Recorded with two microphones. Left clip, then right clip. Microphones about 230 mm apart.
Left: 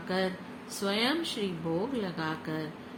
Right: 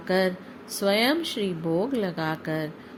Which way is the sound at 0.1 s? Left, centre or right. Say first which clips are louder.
Right 8 dB; right.